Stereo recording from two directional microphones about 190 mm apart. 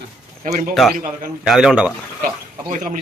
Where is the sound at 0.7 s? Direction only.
Centre (ahead or behind).